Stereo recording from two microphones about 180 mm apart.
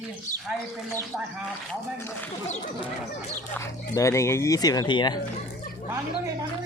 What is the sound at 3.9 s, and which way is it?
Speech, 15° left (ahead or behind).